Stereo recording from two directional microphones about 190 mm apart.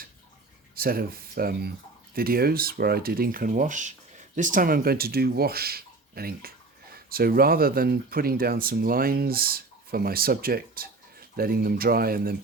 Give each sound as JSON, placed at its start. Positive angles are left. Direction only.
{"t": 0.8, "sound": "speech", "side_deg": -50}